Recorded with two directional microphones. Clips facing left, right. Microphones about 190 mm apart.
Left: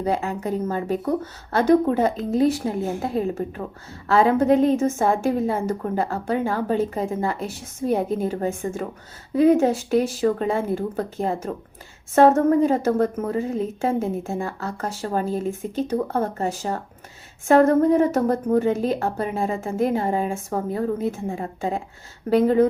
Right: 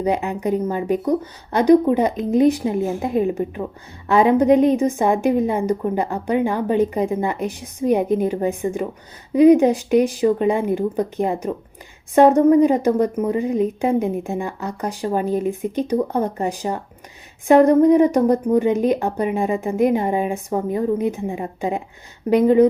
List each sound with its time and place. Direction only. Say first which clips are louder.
0.0 s a woman's voice: right 3 dB; 15° right (ahead or behind)